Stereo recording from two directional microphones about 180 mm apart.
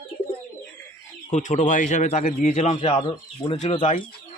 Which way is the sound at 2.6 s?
35° left (ahead or behind).